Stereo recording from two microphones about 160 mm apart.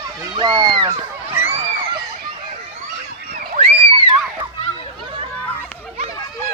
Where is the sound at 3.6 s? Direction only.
35° right (ahead or behind).